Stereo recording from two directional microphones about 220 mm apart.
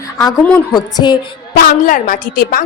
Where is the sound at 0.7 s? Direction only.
20° left (ahead or behind).